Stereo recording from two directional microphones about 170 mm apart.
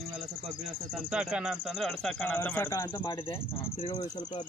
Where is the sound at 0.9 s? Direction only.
5° right (ahead or behind); by 3.3 s 20° left (ahead or behind).